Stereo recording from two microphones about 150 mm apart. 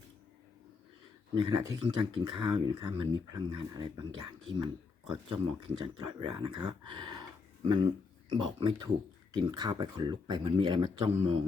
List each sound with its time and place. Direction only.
1.4 s speech: 30° right (ahead or behind)